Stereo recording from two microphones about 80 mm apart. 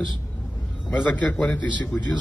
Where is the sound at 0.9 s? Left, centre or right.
Centre.